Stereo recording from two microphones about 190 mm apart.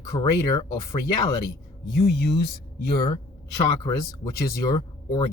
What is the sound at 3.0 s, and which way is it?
Speech, 25° left (ahead or behind).